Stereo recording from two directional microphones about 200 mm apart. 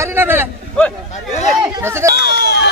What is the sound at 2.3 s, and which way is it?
Run, 55° left (ahead or behind).